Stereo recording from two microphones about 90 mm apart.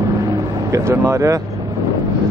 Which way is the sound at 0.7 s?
35° right (ahead or behind).